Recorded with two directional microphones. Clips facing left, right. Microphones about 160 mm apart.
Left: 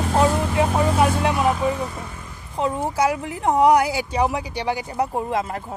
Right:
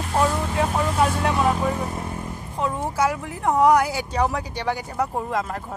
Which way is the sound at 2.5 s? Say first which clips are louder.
Left 3 dB; 25° left (ahead or behind).